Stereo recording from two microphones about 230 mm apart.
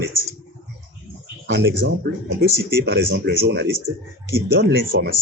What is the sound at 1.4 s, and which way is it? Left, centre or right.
Speech, right.